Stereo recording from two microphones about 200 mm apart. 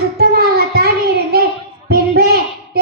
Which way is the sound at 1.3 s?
50° right (ahead or behind).